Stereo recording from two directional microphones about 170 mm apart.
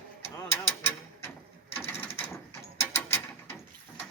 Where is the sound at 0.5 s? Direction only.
15° left (ahead or behind).